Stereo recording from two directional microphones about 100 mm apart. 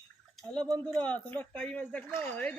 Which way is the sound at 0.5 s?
10° left (ahead or behind).